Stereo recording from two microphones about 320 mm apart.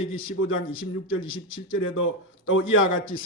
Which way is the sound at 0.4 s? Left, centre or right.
Left.